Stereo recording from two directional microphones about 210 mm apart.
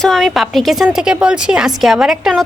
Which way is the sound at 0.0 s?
Centre (ahead or behind).